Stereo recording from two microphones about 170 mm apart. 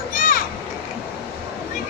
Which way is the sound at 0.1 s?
50° left (ahead or behind).